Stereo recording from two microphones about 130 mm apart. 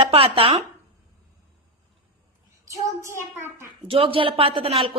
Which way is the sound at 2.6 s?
25° right (ahead or behind).